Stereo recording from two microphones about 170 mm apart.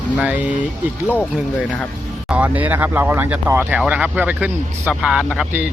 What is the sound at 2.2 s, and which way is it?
Speech, 5° right (ahead or behind).